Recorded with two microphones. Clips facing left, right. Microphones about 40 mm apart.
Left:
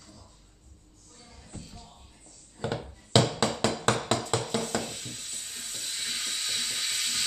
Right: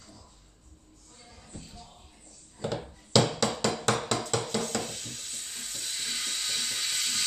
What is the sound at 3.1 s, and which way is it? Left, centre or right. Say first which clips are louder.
Hammer: even; left.